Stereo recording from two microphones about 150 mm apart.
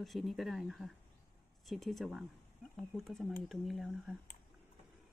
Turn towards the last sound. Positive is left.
turn(degrees=0)  # may be behind; listen again after turning